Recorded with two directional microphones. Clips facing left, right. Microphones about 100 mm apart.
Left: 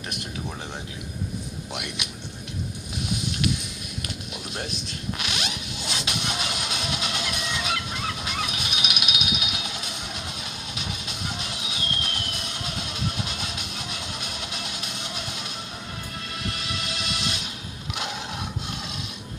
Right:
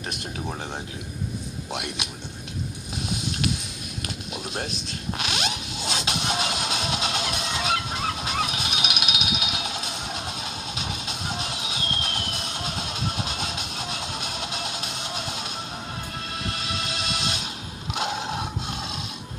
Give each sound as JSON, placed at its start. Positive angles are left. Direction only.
{"t": 1.7, "sound": "speech", "side_deg": -25}
{"t": 5.1, "sound": "music", "side_deg": -30}
{"t": 11.3, "sound": "music", "side_deg": -25}
{"t": 16.5, "sound": "music", "side_deg": -30}
{"t": 17.9, "sound": "a sound", "side_deg": -25}